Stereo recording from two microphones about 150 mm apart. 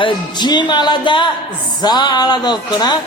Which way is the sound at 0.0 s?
30° left (ahead or behind).